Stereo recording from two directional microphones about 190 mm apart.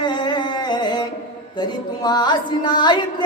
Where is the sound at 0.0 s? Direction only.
25° left (ahead or behind).